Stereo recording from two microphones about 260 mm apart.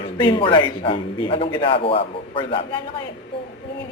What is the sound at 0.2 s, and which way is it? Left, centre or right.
A man's voice, centre.